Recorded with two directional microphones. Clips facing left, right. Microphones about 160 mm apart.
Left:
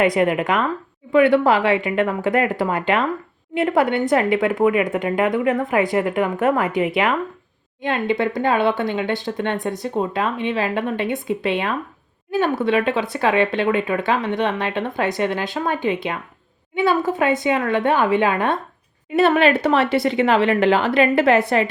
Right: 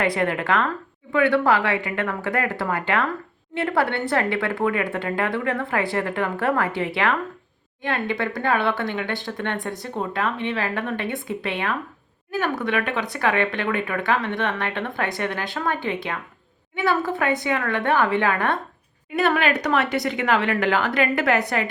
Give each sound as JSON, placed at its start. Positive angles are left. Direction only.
{"t": 0.0, "sound": "speech", "side_deg": 20}